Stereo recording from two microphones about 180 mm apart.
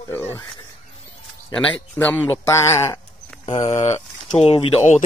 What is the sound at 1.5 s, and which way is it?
Speech, 10° left (ahead or behind).